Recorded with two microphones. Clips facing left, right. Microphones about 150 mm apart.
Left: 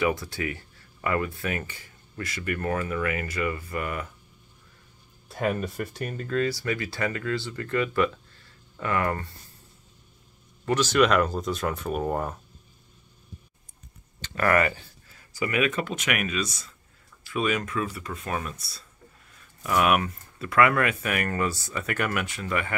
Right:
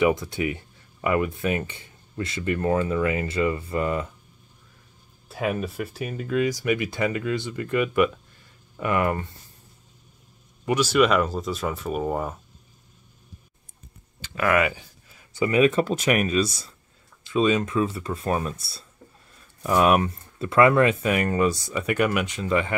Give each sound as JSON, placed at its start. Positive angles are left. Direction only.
{"t": 0.0, "sound": "speech", "side_deg": -20}
{"t": 5.3, "sound": "speech", "side_deg": -5}
{"t": 10.6, "sound": "speech", "side_deg": -10}
{"t": 14.2, "sound": "speech", "side_deg": -5}
{"t": 17.2, "sound": "speech", "side_deg": -25}